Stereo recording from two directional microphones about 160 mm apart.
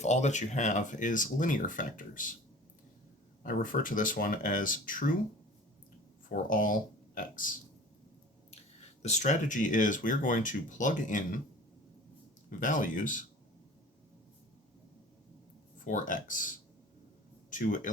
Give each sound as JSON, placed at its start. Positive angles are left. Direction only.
{"t": 0.0, "sound": "speech", "side_deg": 45}
{"t": 3.4, "sound": "speech", "side_deg": 60}
{"t": 6.2, "sound": "speech", "side_deg": 60}
{"t": 9.0, "sound": "speech", "side_deg": 45}
{"t": 12.5, "sound": "speech", "side_deg": 55}
{"t": 15.8, "sound": "speech", "side_deg": 55}